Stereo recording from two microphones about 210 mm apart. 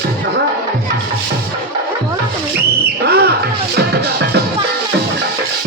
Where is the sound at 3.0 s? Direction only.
50° right (ahead or behind).